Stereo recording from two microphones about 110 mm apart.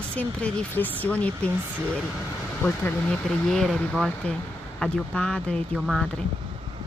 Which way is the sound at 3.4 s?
5° left (ahead or behind).